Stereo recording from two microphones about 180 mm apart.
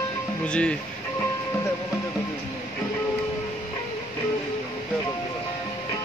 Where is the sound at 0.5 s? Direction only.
5° left (ahead or behind).